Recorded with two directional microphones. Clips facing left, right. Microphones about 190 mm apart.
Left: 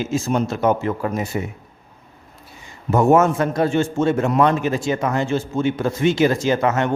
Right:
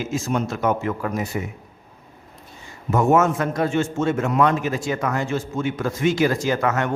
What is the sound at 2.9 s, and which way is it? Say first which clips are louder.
A man's voice: left 3 dB; 35° left (ahead or behind).